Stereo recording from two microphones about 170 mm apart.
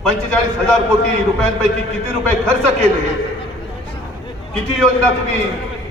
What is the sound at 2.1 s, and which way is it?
Speech, 5° left (ahead or behind).